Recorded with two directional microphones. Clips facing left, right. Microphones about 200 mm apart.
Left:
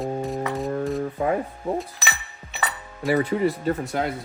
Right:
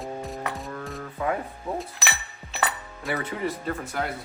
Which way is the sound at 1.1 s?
30° left (ahead or behind).